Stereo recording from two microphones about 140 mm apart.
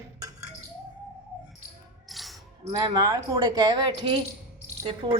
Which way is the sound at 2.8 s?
25° right (ahead or behind).